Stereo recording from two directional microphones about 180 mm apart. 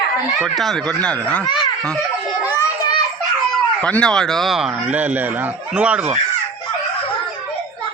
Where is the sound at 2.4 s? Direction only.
15° left (ahead or behind).